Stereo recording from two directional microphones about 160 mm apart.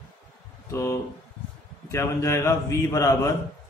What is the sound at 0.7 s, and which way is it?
A man's voice, 15° left (ahead or behind).